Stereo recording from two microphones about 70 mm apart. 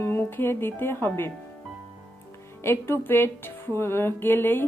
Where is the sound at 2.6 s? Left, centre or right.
Left.